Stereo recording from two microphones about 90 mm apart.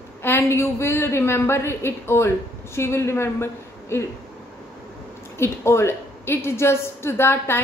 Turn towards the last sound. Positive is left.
turn(degrees=25)  # may be behind; listen again after turning